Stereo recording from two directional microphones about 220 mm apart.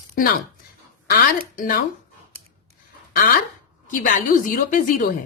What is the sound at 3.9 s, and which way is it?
Speech, 35° left (ahead or behind).